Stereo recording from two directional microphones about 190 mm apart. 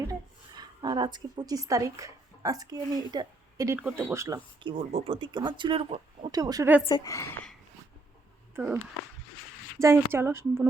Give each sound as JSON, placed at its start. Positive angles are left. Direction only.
{"t": 0.1, "sound": "a woman's voice", "side_deg": -20}
{"t": 4.7, "sound": "speech", "side_deg": -30}
{"t": 6.4, "sound": "a woman's voice", "side_deg": -20}
{"t": 6.8, "sound": "a woman's voice", "side_deg": 20}
{"t": 8.5, "sound": "speech", "side_deg": -10}
{"t": 9.8, "sound": "a woman's voice", "side_deg": -15}